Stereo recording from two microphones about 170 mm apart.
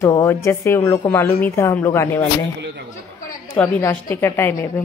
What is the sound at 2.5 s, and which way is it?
Speech, 90° right.